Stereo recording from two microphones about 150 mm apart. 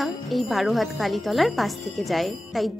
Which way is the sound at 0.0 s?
Centre (ahead or behind).